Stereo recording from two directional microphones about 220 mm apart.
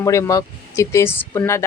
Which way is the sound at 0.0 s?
15° left (ahead or behind).